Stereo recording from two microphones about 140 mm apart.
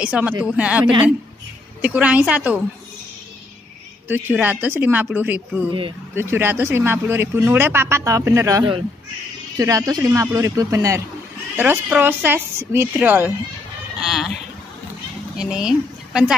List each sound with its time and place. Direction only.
0.0 s speech: 10° right (ahead or behind)
4.1 s speech: 15° right (ahead or behind)
5.7 s speech: 40° right (ahead or behind)
6.1 s speech: 15° right (ahead or behind)
15.3 s speech: 5° right (ahead or behind)